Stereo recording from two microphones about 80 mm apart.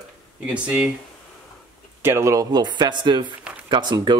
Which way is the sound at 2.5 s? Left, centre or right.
Right.